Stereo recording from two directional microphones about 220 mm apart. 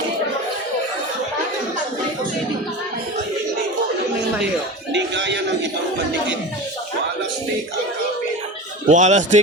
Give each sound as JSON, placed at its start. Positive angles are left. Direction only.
{"t": 4.9, "sound": "music", "side_deg": -55}
{"t": 8.9, "sound": "speech", "side_deg": -35}